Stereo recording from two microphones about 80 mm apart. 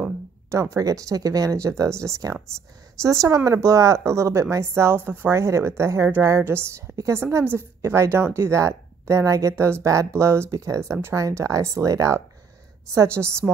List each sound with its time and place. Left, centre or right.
0.5 s a woman's voice: right